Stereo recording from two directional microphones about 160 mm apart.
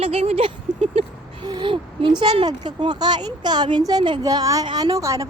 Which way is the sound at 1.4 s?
30° right (ahead or behind).